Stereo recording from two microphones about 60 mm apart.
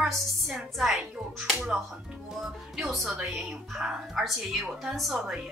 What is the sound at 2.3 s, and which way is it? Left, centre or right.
A woman's voice, centre.